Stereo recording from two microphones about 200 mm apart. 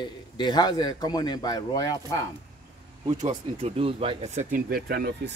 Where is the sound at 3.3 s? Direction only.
30° right (ahead or behind); by 5.3 s 50° right (ahead or behind).